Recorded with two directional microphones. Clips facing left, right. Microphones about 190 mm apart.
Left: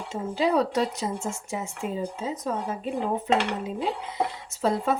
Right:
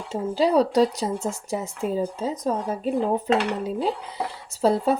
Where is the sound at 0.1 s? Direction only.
35° right (ahead or behind).